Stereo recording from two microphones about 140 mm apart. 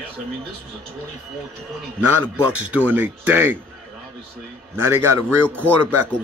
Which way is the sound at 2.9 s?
10° right (ahead or behind).